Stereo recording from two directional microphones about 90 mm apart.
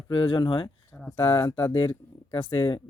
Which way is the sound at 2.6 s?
70° left (ahead or behind).